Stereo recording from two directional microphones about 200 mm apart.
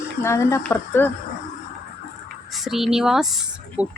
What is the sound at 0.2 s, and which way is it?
Speech, 15° left (ahead or behind).